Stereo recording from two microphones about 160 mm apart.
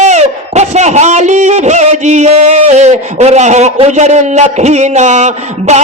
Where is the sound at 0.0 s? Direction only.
45° right (ahead or behind).